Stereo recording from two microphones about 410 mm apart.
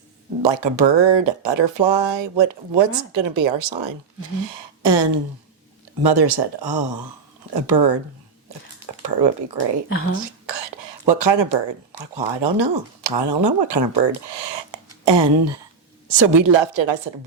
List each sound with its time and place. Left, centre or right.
0.4 s speech: right
9.0 s speech: right
10.2 s whispering: right
11.1 s speech: right